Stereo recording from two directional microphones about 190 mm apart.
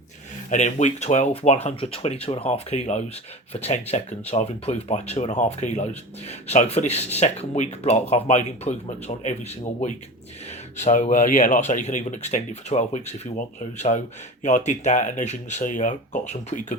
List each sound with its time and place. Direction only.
0.5 s speech: 40° left (ahead or behind)